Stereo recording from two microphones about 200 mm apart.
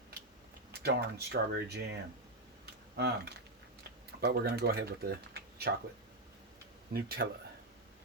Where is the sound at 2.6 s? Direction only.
55° right (ahead or behind).